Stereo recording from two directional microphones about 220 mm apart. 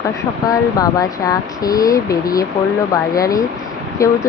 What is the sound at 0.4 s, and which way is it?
Speech, 15° left (ahead or behind).